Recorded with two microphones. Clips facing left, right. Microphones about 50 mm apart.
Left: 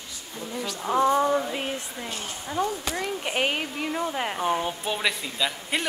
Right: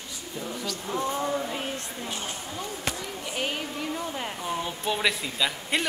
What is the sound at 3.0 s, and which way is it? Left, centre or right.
Speech, left.